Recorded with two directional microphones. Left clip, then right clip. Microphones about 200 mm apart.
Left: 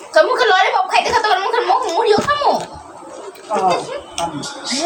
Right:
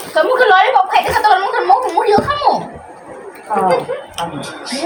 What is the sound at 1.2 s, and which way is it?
Speech, 40° left (ahead or behind).